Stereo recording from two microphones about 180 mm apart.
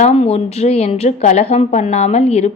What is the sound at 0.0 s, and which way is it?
Speech, 35° left (ahead or behind).